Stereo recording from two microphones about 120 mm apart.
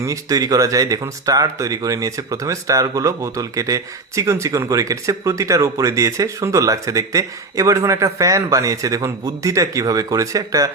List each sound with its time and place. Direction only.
0.0 s speech: 30° right (ahead or behind)